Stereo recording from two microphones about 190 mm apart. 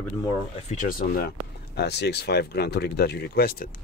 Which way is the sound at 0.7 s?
45° left (ahead or behind).